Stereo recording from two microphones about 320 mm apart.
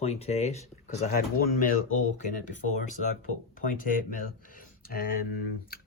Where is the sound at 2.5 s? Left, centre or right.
Left.